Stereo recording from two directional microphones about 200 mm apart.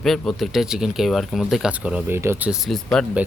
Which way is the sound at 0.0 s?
Centre (ahead or behind).